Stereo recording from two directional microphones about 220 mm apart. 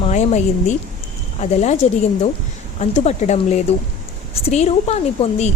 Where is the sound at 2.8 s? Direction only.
30° left (ahead or behind).